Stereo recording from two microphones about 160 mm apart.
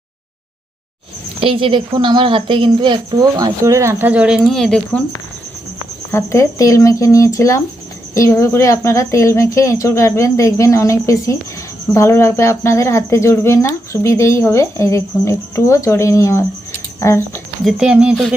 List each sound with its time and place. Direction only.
1.4 s a woman's voice: 35° right (ahead or behind); by 5.0 s 5° left (ahead or behind)
6.1 s speech: 15° left (ahead or behind)
17.7 s speech: 5° right (ahead or behind)